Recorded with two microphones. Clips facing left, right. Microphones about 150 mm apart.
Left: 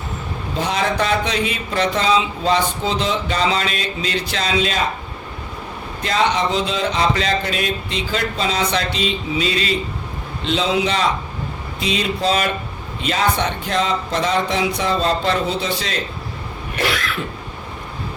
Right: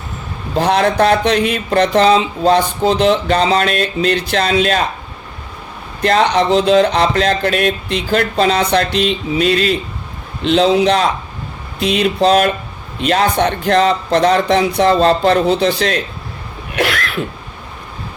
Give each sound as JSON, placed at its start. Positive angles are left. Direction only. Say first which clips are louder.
{"t": 0.6, "sound": "speech", "louder": "right 8 dB", "side_deg": -65}
{"t": 3.1, "sound": "speech", "louder": "right 7 dB", "side_deg": -60}
{"t": 6.0, "sound": "speech", "louder": "right 6 dB", "side_deg": -65}